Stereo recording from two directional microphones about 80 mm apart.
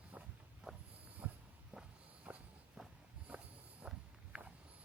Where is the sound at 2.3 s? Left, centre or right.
Centre.